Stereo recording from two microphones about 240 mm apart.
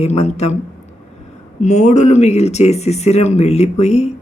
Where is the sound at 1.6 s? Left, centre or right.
Left.